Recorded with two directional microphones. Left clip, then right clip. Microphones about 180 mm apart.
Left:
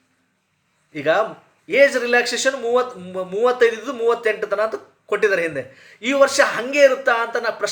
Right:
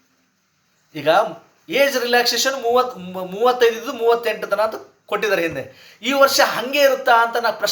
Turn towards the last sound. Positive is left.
turn(degrees=15)  # may be behind; listen again after turning